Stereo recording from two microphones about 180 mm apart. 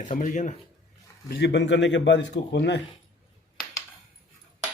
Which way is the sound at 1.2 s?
65° left (ahead or behind).